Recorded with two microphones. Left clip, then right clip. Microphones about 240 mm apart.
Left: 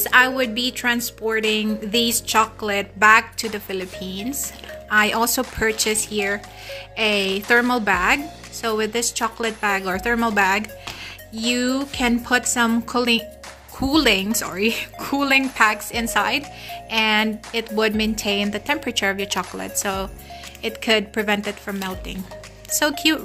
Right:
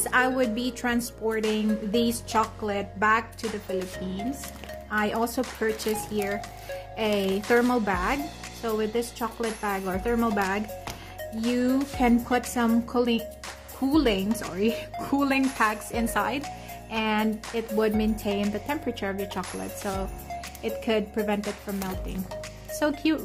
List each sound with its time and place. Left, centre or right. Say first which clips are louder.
0.0 s a woman's voice: left 7 dB; centre